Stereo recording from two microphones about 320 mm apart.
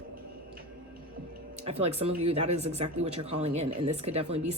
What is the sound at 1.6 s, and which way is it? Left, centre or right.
Speech, centre.